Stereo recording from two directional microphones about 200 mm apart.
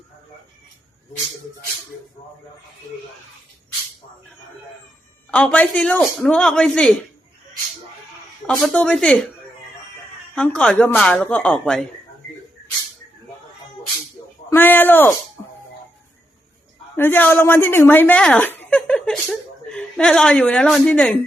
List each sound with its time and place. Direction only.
5.3 s speech: 5° left (ahead or behind)
8.4 s speech: 5° left (ahead or behind)
10.3 s speech: 5° left (ahead or behind)
14.5 s a woman's voice: 10° left (ahead or behind)
17.0 s a woman's voice: 10° left (ahead or behind)